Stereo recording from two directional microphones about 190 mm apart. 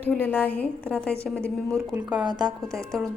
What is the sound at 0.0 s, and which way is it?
A woman's voice, 10° left (ahead or behind).